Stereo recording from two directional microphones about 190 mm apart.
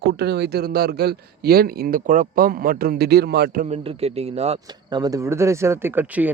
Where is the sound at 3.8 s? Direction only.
30° right (ahead or behind).